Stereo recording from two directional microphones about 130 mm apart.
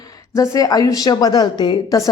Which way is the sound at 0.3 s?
25° left (ahead or behind).